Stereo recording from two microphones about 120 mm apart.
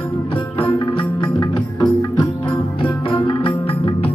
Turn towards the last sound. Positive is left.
turn(degrees=45)  # may be behind; listen again after turning